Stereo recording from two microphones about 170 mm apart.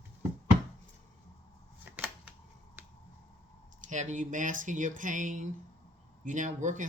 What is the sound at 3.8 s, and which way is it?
Speech, 45° right (ahead or behind).